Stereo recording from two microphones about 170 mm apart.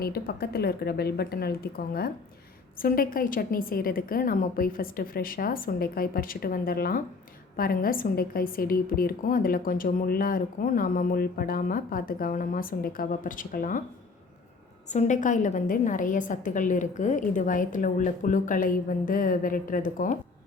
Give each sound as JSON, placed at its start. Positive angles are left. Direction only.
{"t": 0.0, "sound": "a woman's voice", "side_deg": 65}
{"t": 14.8, "sound": "a woman's voice", "side_deg": 45}